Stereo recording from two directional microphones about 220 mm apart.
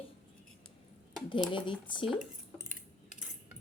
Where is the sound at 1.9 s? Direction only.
20° left (ahead or behind).